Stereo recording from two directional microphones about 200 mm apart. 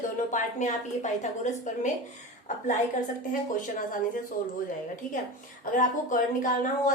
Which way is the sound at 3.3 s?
40° left (ahead or behind).